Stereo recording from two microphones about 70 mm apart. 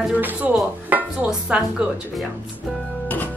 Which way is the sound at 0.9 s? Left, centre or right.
Right.